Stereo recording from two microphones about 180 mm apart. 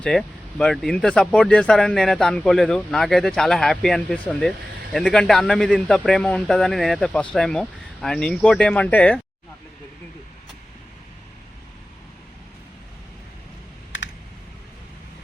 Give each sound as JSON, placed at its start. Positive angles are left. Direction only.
{"t": 0.0, "sound": "speech", "side_deg": 5}